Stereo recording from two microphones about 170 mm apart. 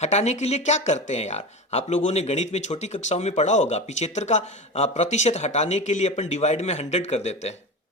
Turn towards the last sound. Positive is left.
turn(degrees=40)  # may be behind; listen again after turning